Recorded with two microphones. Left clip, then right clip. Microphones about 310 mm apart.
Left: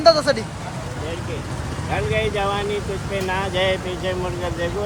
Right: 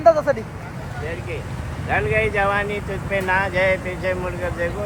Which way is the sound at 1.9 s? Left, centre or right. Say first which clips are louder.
Right 3 dB; centre.